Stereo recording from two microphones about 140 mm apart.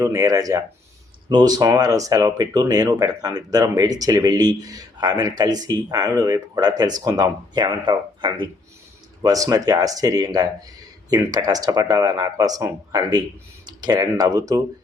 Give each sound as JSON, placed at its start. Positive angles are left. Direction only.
{"t": 0.0, "sound": "speech", "side_deg": -25}